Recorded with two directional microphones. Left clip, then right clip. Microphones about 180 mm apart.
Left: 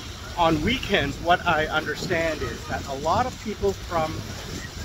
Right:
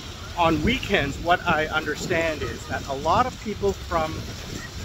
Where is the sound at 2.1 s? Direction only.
20° right (ahead or behind).